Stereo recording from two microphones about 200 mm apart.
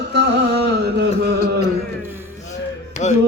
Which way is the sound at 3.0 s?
40° left (ahead or behind).